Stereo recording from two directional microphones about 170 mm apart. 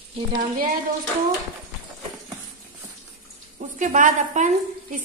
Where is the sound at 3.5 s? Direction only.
50° right (ahead or behind).